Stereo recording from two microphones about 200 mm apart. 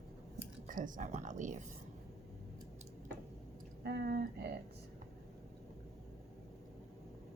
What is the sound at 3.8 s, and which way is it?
Speech, 50° right (ahead or behind).